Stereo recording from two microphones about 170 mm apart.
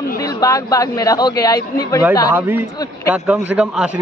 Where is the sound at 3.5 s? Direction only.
5° right (ahead or behind).